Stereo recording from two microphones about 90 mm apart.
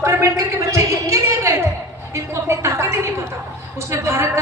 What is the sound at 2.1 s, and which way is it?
A woman's voice, 30° right (ahead or behind).